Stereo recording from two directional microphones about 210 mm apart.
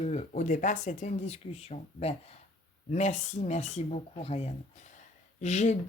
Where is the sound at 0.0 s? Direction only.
30° left (ahead or behind).